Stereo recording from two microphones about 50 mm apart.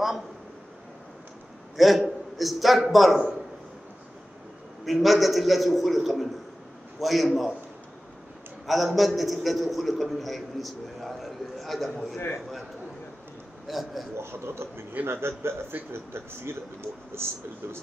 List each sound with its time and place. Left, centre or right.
1.8 s a man's voice: centre
4.8 s a man's voice: centre
8.6 s a man's voice: centre
13.7 s a man's voice: centre
14.1 s a man's voice: right